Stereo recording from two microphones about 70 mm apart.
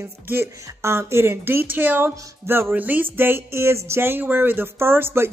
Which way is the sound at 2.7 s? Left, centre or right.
Right.